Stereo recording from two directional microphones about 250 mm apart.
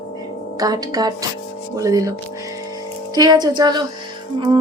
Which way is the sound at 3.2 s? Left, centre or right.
Centre.